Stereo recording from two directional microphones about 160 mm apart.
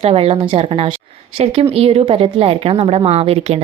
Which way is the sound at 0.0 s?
40° right (ahead or behind).